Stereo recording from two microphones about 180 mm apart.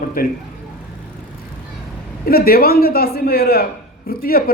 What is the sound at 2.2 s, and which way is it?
A man's voice, 55° left (ahead or behind).